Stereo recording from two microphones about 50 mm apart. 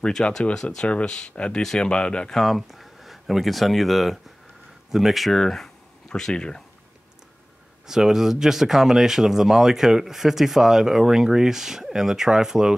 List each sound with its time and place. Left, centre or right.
0.0 s speech: centre
2.3 s speech: centre
7.8 s speech: centre